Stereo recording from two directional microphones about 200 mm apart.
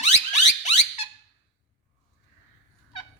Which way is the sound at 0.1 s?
35° left (ahead or behind).